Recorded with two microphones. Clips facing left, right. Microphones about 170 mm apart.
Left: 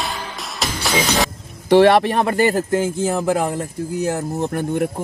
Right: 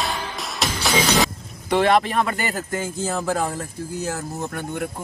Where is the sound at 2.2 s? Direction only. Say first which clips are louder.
Left 7 dB; 30° left (ahead or behind).